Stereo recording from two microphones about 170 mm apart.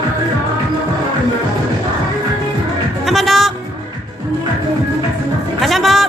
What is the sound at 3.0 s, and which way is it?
Music, centre (ahead or behind).